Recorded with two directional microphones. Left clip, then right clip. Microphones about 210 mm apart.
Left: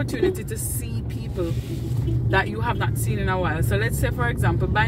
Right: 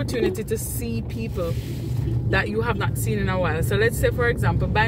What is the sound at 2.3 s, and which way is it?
Speech, 10° right (ahead or behind).